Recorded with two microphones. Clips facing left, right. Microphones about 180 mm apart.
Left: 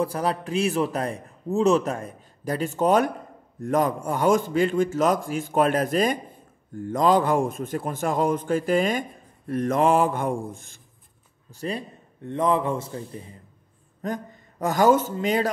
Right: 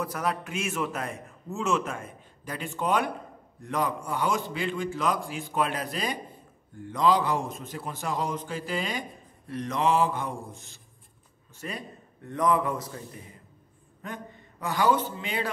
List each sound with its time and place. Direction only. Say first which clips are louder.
0.0 s a man's voice: left 5 dB; 30° left (ahead or behind); by 10.8 s 50° left (ahead or behind)
11.5 s a man's voice: left 7 dB; 30° left (ahead or behind)
14.0 s a man's voice: left 9 dB; 40° left (ahead or behind)